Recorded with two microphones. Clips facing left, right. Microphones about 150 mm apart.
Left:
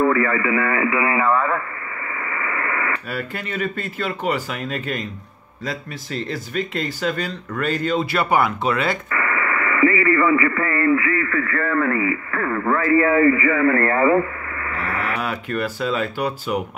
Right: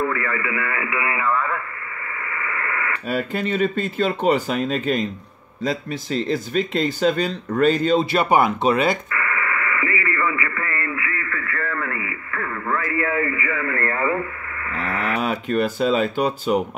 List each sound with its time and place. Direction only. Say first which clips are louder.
0.1 s speech: left 6 dB; 35° left (ahead or behind)
2.4 s radio: left 2 dB; 35° left (ahead or behind)
3.1 s speech: right 5 dB; 20° right (ahead or behind)
9.7 s speech: left 8 dB; 40° left (ahead or behind)
14.8 s speech: right 2 dB; 20° right (ahead or behind)